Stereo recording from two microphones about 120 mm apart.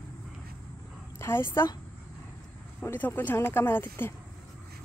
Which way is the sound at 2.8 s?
15° left (ahead or behind).